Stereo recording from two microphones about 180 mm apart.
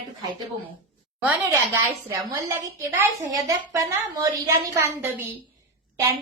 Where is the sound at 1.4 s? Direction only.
15° right (ahead or behind).